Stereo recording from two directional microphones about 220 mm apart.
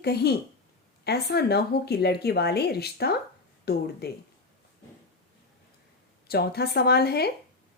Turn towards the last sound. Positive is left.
turn(degrees=45)  # may be behind; listen again after turning